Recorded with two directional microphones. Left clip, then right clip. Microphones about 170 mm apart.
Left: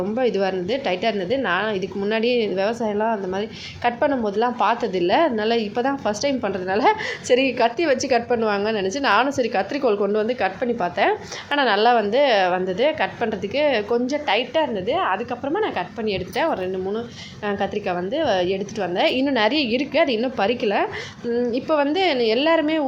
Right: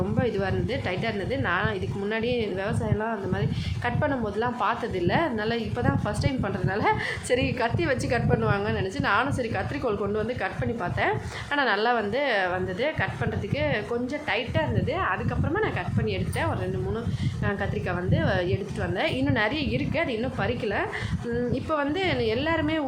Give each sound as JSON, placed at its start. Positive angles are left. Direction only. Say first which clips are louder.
{"t": 0.2, "sound": "a woman's voice", "louder": "left 7 dB", "side_deg": 20}